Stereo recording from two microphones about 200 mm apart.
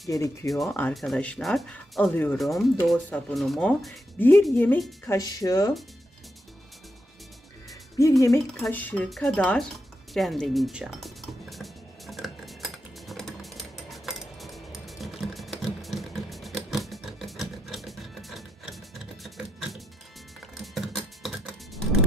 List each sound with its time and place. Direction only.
0.1 s speech: 15° left (ahead or behind)
5.0 s speech: 15° left (ahead or behind)
8.2 s speech: 15° left (ahead or behind)
10.1 s music: centre (ahead or behind)